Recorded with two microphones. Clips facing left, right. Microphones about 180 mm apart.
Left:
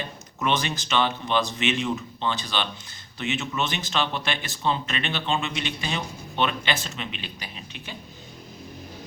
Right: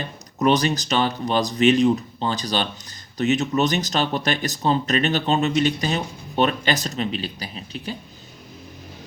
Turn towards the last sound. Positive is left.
turn(degrees=-35)  # may be behind; listen again after turning